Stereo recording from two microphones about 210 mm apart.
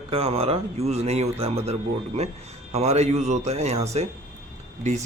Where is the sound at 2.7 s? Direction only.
30° right (ahead or behind).